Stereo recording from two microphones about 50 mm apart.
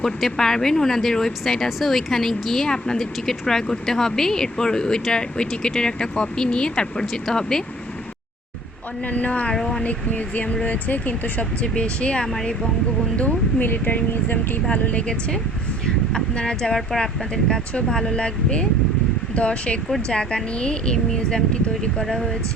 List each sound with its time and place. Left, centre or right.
0.0 s speech: centre
9.0 s speech: left
9.6 s speech: centre
9.8 s speech: left
10.8 s speech: left
11.1 s speech: left
13.6 s speech: left
14.7 s speech: left
16.1 s speech: centre